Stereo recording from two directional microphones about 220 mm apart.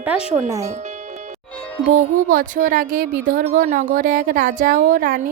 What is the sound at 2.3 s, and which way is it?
Speech, 40° right (ahead or behind).